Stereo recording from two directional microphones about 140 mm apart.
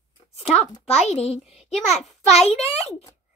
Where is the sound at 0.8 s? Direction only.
50° left (ahead or behind).